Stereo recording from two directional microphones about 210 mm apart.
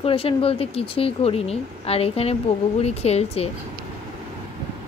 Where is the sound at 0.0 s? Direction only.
25° left (ahead or behind).